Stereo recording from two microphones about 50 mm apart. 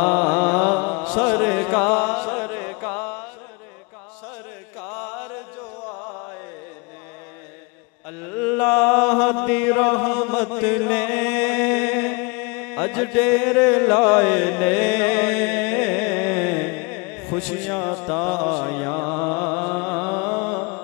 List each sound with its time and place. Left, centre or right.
0.0 s mantra: left
1.2 s music: centre
4.7 s music: left
5.9 s music: left
8.2 s a sound: left
9.5 s chant: centre
10.5 s music: left
11.3 s a sound: centre
11.8 s mantra: left
13.4 s music: centre
17.6 s mantra: centre